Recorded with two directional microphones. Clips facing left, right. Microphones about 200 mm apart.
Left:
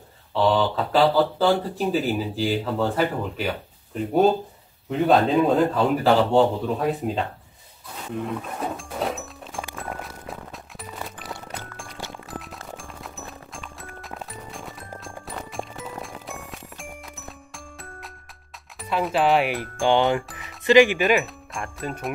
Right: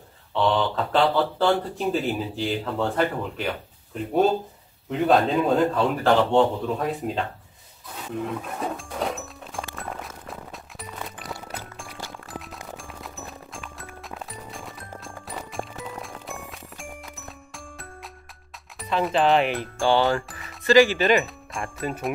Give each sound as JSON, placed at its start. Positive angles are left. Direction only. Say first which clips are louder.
{"t": 0.3, "sound": "speech", "louder": "left 2 dB", "side_deg": 5}
{"t": 8.3, "sound": "music", "louder": "left 1 dB", "side_deg": 0}
{"t": 18.8, "sound": "speech", "louder": "even", "side_deg": 5}
{"t": 20.2, "sound": "music", "louder": "even", "side_deg": 0}
{"t": 20.6, "sound": "speech", "louder": "left 1 dB", "side_deg": 15}
{"t": 21.0, "sound": "speech", "louder": "even", "side_deg": 5}